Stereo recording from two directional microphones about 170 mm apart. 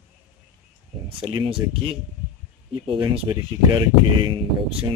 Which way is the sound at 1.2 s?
30° right (ahead or behind).